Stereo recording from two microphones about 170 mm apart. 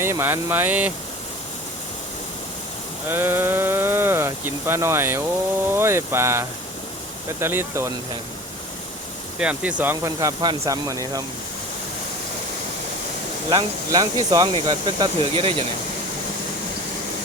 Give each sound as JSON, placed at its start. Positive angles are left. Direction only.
{"t": 0.0, "sound": "speech", "side_deg": -15}
{"t": 3.1, "sound": "speech", "side_deg": -15}
{"t": 9.4, "sound": "speech", "side_deg": -5}
{"t": 13.5, "sound": "speech", "side_deg": -25}